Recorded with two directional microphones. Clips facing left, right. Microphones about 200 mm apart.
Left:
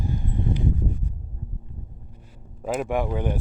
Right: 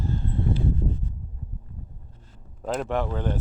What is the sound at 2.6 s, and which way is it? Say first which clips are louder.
Speech: left 2 dB; 10° left (ahead or behind).